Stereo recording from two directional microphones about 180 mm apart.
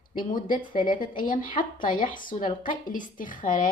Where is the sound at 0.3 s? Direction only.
50° left (ahead or behind).